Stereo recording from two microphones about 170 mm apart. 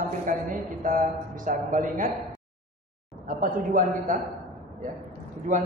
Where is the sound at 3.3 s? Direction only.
55° right (ahead or behind).